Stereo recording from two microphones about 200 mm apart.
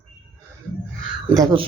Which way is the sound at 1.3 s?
20° right (ahead or behind).